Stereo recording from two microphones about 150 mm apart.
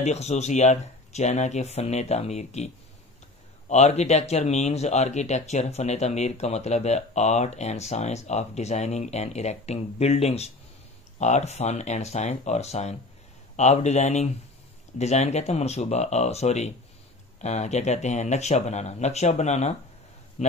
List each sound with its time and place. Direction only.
0.0 s speech: 45° left (ahead or behind)